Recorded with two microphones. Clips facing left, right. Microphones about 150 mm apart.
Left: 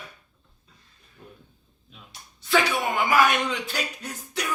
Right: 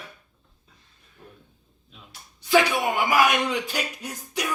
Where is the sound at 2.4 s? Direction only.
15° right (ahead or behind).